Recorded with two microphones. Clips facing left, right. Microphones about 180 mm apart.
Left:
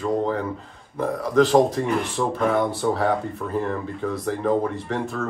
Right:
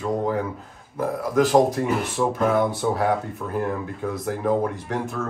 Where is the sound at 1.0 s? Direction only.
5° right (ahead or behind).